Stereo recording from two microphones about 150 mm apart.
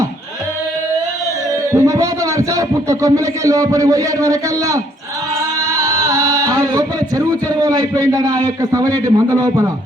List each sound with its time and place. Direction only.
1.7 s a man's voice: 20° right (ahead or behind)
5.8 s singing: 20° right (ahead or behind)
7.3 s a man's voice: 25° right (ahead or behind)